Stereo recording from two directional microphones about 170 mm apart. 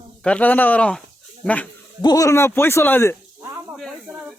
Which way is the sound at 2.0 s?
20° left (ahead or behind).